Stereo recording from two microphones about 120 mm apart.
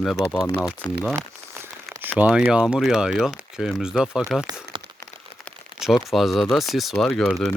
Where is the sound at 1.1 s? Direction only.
20° right (ahead or behind).